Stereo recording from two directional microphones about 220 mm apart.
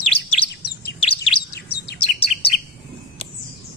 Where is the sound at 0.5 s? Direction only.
50° left (ahead or behind).